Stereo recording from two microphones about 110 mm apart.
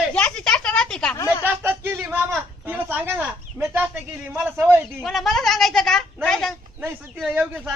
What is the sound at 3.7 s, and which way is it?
Speech, 15° right (ahead or behind).